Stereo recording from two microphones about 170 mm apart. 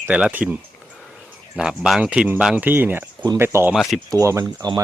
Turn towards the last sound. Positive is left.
turn(degrees=-20)  # may be behind; listen again after turning